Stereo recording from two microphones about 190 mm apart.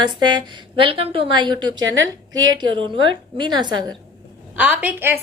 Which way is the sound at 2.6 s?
25° right (ahead or behind).